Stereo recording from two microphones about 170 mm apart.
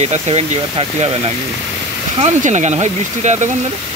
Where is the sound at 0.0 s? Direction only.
40° right (ahead or behind).